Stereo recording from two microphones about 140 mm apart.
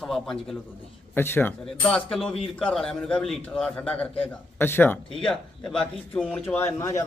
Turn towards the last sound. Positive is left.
turn(degrees=25)  # may be behind; listen again after turning